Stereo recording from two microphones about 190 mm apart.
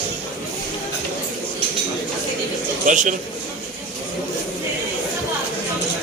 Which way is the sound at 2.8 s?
40° right (ahead or behind).